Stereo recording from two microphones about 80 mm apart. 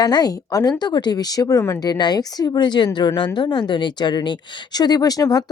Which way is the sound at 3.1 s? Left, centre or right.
Left.